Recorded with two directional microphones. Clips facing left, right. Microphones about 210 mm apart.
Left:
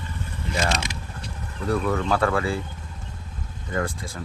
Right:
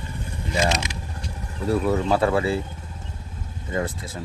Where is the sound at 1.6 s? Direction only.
25° right (ahead or behind).